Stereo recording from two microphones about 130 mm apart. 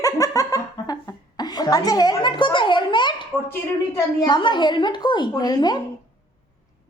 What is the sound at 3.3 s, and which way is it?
Speech, 15° left (ahead or behind).